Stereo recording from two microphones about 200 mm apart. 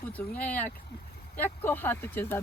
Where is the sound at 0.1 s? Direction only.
5° left (ahead or behind).